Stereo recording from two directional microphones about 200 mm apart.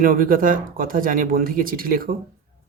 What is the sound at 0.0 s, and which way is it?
Speech, 45° right (ahead or behind).